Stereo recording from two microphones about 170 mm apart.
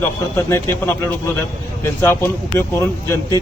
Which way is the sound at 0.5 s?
15° left (ahead or behind).